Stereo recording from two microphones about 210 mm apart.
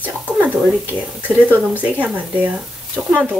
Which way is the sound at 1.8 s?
5° right (ahead or behind).